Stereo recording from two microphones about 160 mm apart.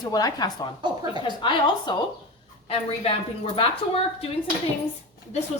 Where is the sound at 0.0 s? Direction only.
25° left (ahead or behind).